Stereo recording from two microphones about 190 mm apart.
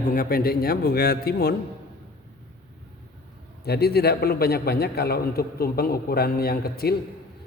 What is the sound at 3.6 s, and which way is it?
A man's voice, 55° left (ahead or behind).